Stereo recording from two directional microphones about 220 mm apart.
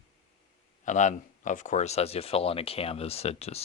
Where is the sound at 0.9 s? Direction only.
35° left (ahead or behind).